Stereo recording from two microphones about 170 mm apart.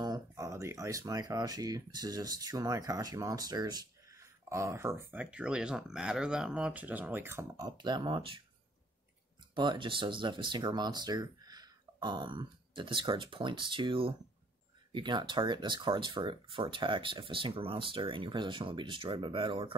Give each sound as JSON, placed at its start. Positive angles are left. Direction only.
{"t": 0.0, "sound": "speech", "side_deg": -20}
{"t": 9.6, "sound": "speech", "side_deg": -30}